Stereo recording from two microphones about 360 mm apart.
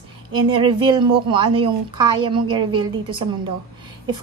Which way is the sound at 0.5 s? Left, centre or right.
Centre.